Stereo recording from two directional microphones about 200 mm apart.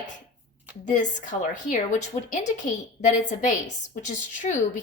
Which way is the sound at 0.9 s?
40° left (ahead or behind).